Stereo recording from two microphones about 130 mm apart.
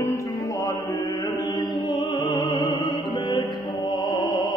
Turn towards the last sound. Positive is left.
turn(degrees=35)  # may be behind; listen again after turning